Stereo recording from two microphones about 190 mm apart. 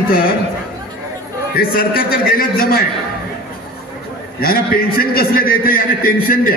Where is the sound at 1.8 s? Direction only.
50° left (ahead or behind).